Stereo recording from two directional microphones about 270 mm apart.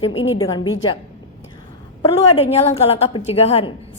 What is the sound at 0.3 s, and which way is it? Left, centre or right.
Speech, centre.